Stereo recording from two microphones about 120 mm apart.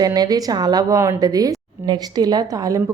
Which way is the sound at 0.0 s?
35° right (ahead or behind).